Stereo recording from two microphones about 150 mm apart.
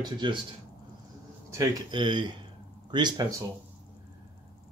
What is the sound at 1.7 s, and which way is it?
Speech, 30° right (ahead or behind).